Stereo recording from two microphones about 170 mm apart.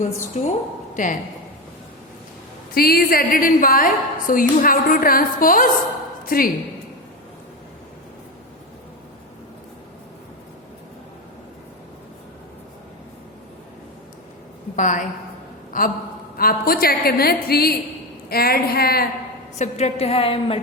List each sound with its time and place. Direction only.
0.0 s a woman's voice: 45° left (ahead or behind)
2.7 s a woman's voice: 65° left (ahead or behind)
14.8 s a woman's voice: 50° left (ahead or behind); by 19.0 s 65° left (ahead or behind)
19.5 s a woman's voice: 40° left (ahead or behind)